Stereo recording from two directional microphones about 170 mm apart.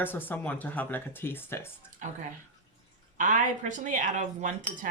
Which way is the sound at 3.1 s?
50° right (ahead or behind).